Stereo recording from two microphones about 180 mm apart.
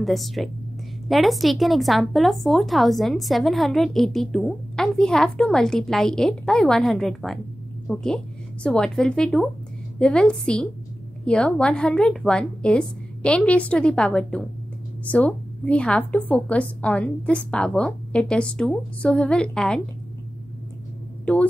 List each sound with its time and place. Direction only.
0.0 s a woman's voice: centre (ahead or behind)
21.3 s a woman's voice: 5° left (ahead or behind)